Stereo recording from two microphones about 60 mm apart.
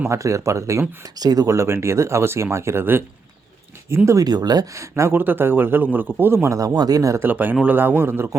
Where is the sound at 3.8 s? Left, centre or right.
Right.